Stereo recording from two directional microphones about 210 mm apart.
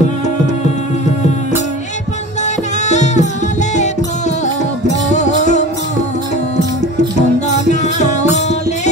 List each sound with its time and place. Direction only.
2.4 s music: 35° left (ahead or behind)
4.8 s music: 35° left (ahead or behind)
7.2 s music: 35° left (ahead or behind)